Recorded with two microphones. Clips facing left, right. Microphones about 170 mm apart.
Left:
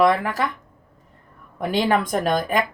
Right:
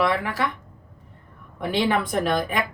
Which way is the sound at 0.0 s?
45° left (ahead or behind).